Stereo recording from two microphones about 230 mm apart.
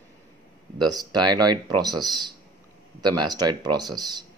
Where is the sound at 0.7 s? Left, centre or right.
Centre.